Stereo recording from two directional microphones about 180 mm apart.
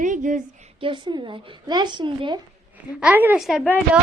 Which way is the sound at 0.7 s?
30° right (ahead or behind).